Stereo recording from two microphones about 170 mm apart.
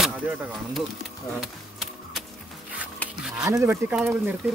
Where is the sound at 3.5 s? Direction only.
15° right (ahead or behind).